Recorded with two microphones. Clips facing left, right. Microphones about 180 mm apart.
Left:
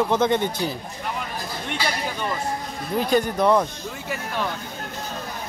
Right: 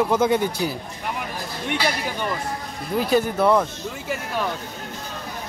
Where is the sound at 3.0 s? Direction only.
5° right (ahead or behind).